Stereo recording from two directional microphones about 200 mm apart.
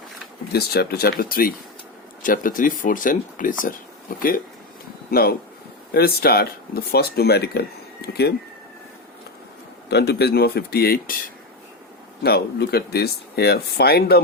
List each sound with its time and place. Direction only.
0.5 s speech: 55° left (ahead or behind)
9.9 s speech: 55° left (ahead or behind)
12.2 s speech: 50° left (ahead or behind)